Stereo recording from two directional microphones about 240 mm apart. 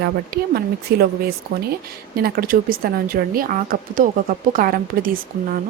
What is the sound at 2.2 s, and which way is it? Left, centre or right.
Speech, right.